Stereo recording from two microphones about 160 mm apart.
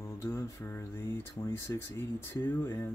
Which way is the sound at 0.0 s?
15° left (ahead or behind).